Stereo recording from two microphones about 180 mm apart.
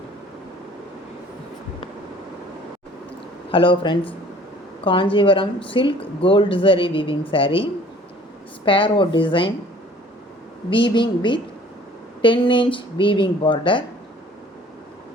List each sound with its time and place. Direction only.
3.5 s a woman's voice: 30° left (ahead or behind)
10.7 s speech: 25° left (ahead or behind)